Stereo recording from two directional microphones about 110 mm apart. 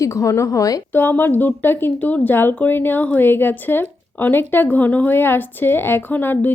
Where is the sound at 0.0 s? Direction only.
30° left (ahead or behind).